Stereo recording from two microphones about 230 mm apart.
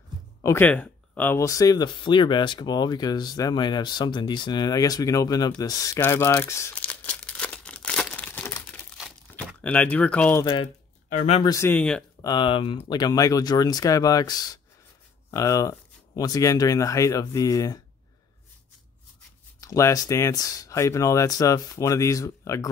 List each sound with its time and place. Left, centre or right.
0.4 s speech: centre
5.6 s crumpling: centre
9.5 s speech: centre
10.4 s speech: left
11.1 s speech: left
11.4 s speech: centre
12.3 s speech: left
19.6 s speech: centre